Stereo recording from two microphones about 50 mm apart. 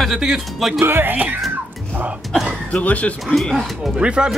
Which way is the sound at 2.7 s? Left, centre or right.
Left.